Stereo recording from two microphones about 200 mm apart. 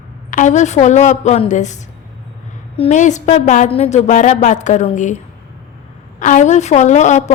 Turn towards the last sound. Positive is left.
turn(degrees=35)  # may be behind; listen again after turning